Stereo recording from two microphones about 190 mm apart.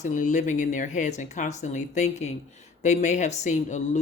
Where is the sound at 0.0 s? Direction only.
40° left (ahead or behind).